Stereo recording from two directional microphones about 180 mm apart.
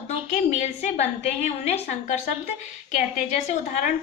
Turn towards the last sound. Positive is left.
turn(degrees=40)  # may be behind; listen again after turning